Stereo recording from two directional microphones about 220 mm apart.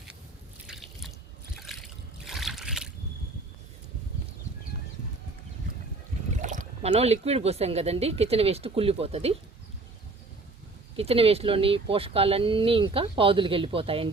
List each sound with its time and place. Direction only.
0.7 s drip: centre (ahead or behind)
1.6 s a sound: centre (ahead or behind)
6.3 s speech: 35° right (ahead or behind)
10.9 s speech: 25° right (ahead or behind)